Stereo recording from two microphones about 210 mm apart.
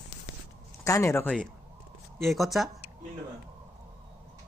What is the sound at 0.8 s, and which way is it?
Speech, 15° left (ahead or behind).